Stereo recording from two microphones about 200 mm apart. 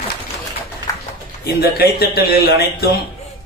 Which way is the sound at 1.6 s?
50° left (ahead or behind).